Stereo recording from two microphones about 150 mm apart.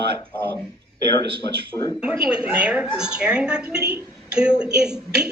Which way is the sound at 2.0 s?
10° right (ahead or behind).